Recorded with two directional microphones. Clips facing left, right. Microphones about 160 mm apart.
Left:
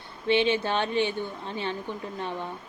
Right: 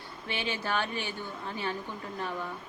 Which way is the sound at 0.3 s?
20° left (ahead or behind).